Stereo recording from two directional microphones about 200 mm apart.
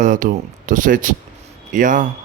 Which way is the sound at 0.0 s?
40° right (ahead or behind).